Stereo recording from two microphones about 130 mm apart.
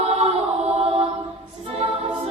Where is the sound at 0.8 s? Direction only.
50° right (ahead or behind).